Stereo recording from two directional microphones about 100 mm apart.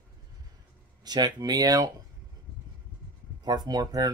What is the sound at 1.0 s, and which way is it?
Speech, 45° right (ahead or behind).